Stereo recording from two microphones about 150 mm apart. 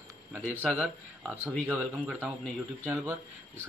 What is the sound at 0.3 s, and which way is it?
Speech, 15° right (ahead or behind).